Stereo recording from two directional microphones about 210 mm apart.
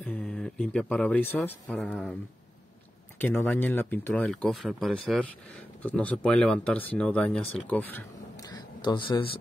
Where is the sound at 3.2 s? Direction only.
10° left (ahead or behind).